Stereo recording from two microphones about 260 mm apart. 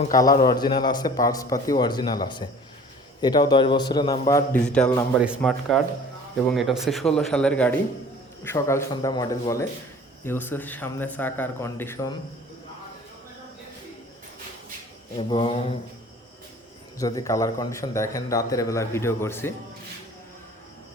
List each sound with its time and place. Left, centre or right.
0.2 s a man's voice: centre
15.1 s mantra: centre
17.0 s a man's voice: centre